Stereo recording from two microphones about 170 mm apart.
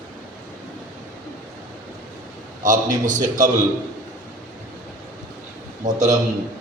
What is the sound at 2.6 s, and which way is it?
Speech, 50° right (ahead or behind).